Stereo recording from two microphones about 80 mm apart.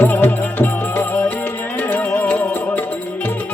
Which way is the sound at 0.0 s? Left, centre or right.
Left.